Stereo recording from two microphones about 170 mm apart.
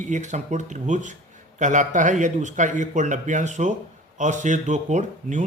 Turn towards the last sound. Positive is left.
turn(degrees=-45)  # may be behind; listen again after turning